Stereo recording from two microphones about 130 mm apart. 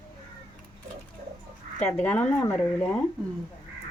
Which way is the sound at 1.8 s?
10° left (ahead or behind).